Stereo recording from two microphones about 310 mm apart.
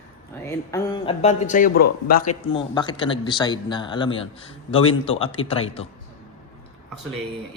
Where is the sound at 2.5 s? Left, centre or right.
Centre.